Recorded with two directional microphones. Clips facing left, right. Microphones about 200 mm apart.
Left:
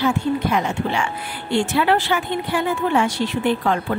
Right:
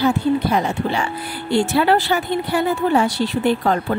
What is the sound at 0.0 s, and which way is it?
Speech, 35° right (ahead or behind).